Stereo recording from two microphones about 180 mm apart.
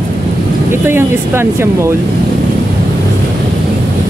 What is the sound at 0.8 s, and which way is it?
Speech, 10° right (ahead or behind).